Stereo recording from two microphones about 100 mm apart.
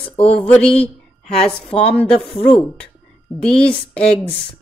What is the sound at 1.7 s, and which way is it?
Speech, 80° left.